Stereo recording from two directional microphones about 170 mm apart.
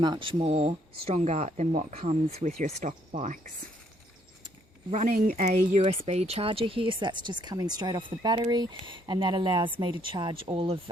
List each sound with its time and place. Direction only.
0.0 s speech: 25° right (ahead or behind); by 3.5 s 45° right (ahead or behind)
4.9 s speech: 50° right (ahead or behind)
5.4 s speech: 40° right (ahead or behind)